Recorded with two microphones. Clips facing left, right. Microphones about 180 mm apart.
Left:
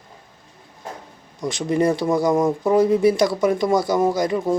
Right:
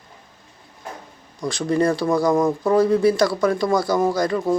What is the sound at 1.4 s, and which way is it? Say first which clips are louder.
Speech: even; 20° left (ahead or behind).